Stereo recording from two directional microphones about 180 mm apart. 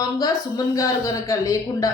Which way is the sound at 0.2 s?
20° left (ahead or behind).